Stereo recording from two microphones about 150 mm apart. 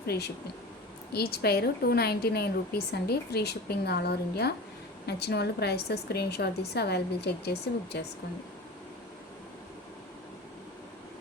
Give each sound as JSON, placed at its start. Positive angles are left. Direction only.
{"t": 1.1, "sound": "a woman's voice", "side_deg": 90}